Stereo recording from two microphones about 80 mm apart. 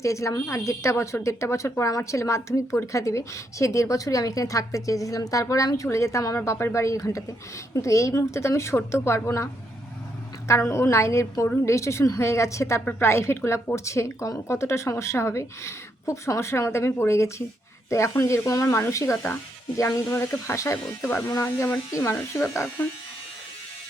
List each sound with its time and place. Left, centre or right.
0.0 s a woman's voice: left
10.5 s a woman's voice: left
12.8 s a woman's voice: left